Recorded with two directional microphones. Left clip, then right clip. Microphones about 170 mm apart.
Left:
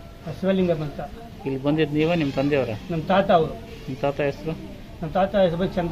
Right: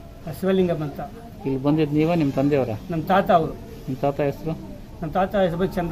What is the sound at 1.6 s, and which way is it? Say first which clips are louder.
A man's voice: right 1 dB; 65° right (ahead or behind).